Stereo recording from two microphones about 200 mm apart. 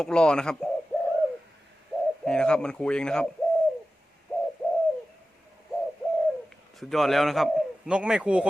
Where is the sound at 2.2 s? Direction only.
5° left (ahead or behind).